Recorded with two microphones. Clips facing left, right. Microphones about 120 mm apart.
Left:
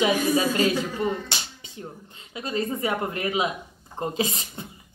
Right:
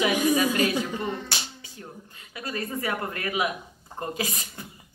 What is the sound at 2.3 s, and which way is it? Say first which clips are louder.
Speech: left 4 dB; 25° left (ahead or behind).